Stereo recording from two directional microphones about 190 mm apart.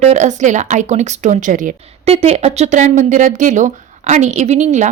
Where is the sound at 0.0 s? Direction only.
40° right (ahead or behind).